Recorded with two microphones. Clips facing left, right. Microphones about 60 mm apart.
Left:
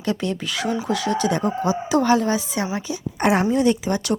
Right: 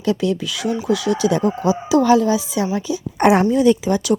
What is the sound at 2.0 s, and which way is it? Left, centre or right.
Speech, left.